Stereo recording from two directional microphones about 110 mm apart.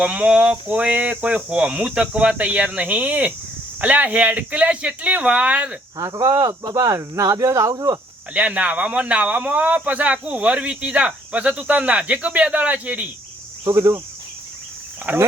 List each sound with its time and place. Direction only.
0.0 s speech: 10° right (ahead or behind)
6.0 s speech: 30° right (ahead or behind)
8.3 s speech: 10° right (ahead or behind)
13.7 s speech: 25° right (ahead or behind)
15.1 s speech: 15° right (ahead or behind)